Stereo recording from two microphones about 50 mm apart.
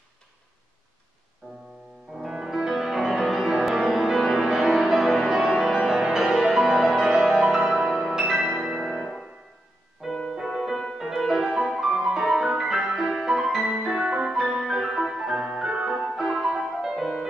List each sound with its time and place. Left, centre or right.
2.1 s music: centre
5.3 s music: centre